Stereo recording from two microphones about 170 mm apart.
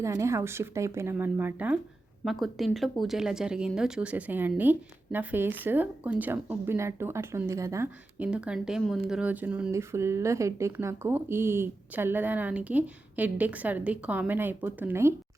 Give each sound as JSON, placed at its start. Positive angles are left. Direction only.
{"t": 0.0, "sound": "speech", "side_deg": -15}
{"t": 8.3, "sound": "speech", "side_deg": -5}